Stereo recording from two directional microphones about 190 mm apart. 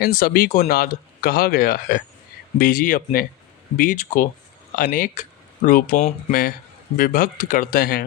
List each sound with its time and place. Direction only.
0.0 s speech: 50° left (ahead or behind)
6.0 s speech: 35° left (ahead or behind)
6.9 s speech: 45° left (ahead or behind)